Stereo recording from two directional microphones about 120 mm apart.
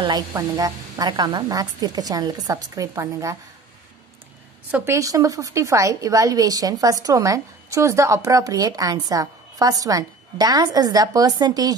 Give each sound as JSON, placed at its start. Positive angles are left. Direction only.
{"t": 0.3, "sound": "speech", "side_deg": -30}
{"t": 4.6, "sound": "a woman's voice", "side_deg": -15}
{"t": 4.9, "sound": "a woman's voice", "side_deg": -30}